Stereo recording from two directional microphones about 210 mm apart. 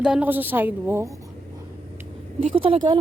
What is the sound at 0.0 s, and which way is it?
Speech, 5° right (ahead or behind).